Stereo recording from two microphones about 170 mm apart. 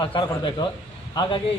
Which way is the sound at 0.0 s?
30° left (ahead or behind).